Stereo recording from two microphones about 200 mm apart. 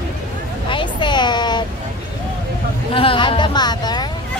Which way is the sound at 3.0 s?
25° left (ahead or behind).